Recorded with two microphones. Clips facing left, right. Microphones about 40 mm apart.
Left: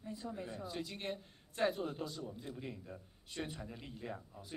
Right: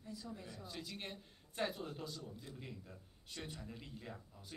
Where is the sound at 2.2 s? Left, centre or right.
Left.